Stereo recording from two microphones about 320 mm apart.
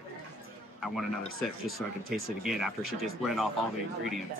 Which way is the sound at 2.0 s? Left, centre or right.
Centre.